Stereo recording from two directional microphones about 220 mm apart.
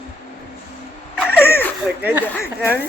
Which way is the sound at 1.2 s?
10° left (ahead or behind).